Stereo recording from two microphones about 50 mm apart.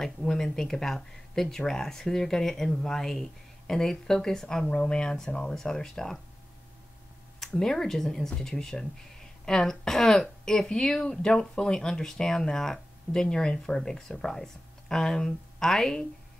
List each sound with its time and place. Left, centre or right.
0.0 s speech: centre
4.6 s speech: centre
7.3 s speech: centre